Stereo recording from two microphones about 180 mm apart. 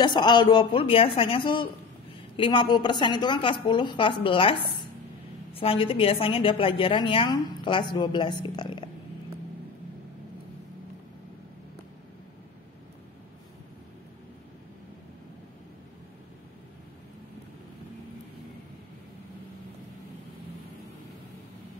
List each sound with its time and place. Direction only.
0.0 s a woman's voice: 25° left (ahead or behind)